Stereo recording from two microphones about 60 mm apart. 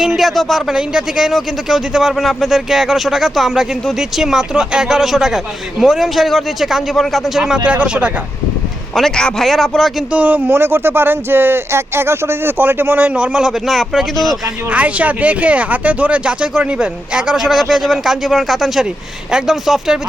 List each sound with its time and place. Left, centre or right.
0.0 s speech: centre
7.3 s speech: centre
9.0 s a man's voice: centre
10.1 s speech: right
10.5 s speech: right
13.0 s speech: right
13.7 s speech: centre
14.7 s speech: right
17.3 s speech: centre